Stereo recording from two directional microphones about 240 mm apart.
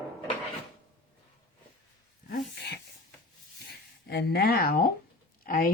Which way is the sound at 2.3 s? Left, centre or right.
Left.